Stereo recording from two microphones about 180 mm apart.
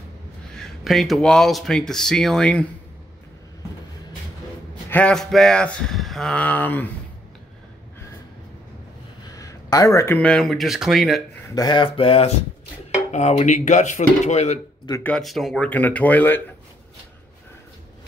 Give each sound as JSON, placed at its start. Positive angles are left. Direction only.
{"t": 0.5, "sound": "speech", "side_deg": 0}
{"t": 4.8, "sound": "speech", "side_deg": 10}
{"t": 9.3, "sound": "speech", "side_deg": 20}
{"t": 11.4, "sound": "speech", "side_deg": 20}
{"t": 15.0, "sound": "speech", "side_deg": 0}